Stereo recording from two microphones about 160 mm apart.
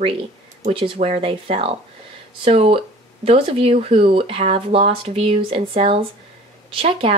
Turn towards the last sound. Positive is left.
turn(degrees=-35)  # may be behind; listen again after turning